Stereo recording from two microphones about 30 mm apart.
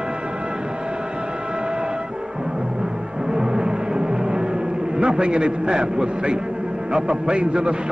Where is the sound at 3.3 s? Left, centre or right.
Right.